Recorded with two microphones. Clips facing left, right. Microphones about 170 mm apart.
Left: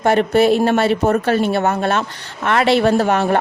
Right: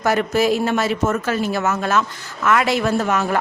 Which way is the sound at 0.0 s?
25° left (ahead or behind).